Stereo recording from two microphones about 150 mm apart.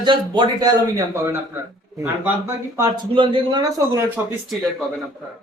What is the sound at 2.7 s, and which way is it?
Speech, 25° right (ahead or behind).